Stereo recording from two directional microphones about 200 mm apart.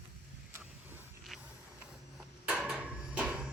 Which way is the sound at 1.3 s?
Centre (ahead or behind).